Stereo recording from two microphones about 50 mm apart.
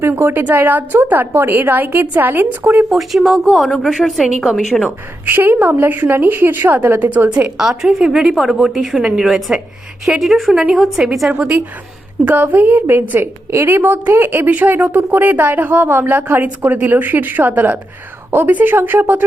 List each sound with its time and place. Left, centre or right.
0.0 s a woman's voice: right
0.4 s a woman's voice: right
2.9 s a woman's voice: centre
5.2 s a woman's voice: right
7.9 s a woman's voice: centre
9.0 s a woman's voice: centre
10.2 s a woman's voice: centre
10.5 s a woman's voice: centre
10.8 s a woman's voice: centre
11.3 s a woman's voice: right
12.2 s a woman's voice: right
13.2 s a woman's voice: right
14.4 s a woman's voice: right